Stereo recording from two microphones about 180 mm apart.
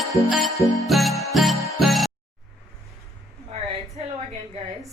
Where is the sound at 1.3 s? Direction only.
Centre (ahead or behind).